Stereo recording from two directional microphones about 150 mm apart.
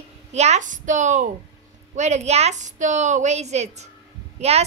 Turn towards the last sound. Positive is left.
turn(degrees=-45)  # may be behind; listen again after turning